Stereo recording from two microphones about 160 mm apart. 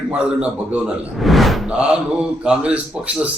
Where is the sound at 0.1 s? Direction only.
5° right (ahead or behind).